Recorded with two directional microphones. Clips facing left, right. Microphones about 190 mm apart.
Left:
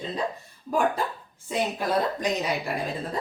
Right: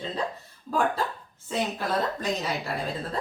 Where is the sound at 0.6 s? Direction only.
15° left (ahead or behind).